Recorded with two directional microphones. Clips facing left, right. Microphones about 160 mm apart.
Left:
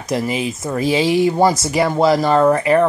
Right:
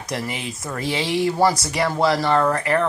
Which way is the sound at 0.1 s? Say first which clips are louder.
Left 8 dB; 20° left (ahead or behind).